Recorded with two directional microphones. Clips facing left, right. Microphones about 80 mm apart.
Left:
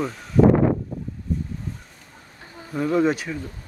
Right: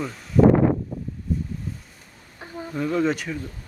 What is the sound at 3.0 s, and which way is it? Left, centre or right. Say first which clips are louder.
Speech: left 2 dB; centre.